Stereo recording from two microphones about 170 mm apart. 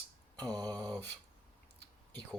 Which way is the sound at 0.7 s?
10° left (ahead or behind).